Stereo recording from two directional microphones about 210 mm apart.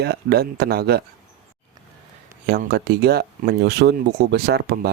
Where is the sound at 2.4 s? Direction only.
50° right (ahead or behind).